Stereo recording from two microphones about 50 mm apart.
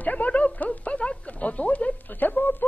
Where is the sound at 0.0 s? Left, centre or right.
Left.